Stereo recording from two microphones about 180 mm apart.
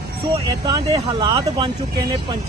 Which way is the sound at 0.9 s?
25° right (ahead or behind).